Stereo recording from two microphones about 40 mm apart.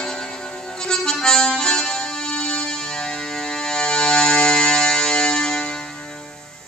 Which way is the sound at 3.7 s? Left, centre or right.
Left.